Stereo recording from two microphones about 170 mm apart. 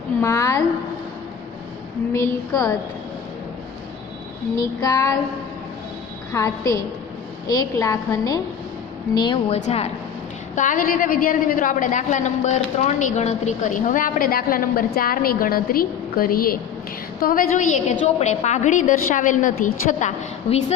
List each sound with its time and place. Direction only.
0.2 s a woman's voice: 15° left (ahead or behind)
2.1 s a woman's voice: 20° left (ahead or behind)
4.8 s a woman's voice: 20° left (ahead or behind)
6.3 s a woman's voice: 20° left (ahead or behind)
9.6 s a woman's voice: 40° left (ahead or behind)